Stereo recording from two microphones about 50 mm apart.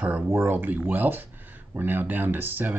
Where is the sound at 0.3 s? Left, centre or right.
Right.